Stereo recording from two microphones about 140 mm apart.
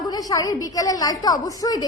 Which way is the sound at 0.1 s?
25° left (ahead or behind).